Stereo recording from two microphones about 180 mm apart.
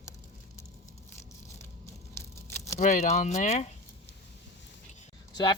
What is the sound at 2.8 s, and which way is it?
Speech, 40° left (ahead or behind).